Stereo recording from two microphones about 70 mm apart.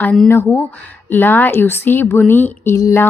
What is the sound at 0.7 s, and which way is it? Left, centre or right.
A woman's voice, left.